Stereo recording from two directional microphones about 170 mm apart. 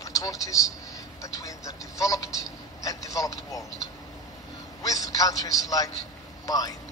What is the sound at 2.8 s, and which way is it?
Speech, 20° left (ahead or behind).